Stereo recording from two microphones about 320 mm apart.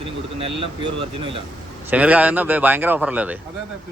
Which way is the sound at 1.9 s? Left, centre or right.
Centre.